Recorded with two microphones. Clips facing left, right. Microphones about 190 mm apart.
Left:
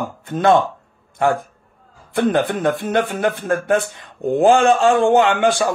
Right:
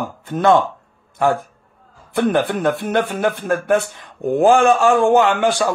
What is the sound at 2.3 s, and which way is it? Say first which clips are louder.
A man's voice: even; 20° left (ahead or behind).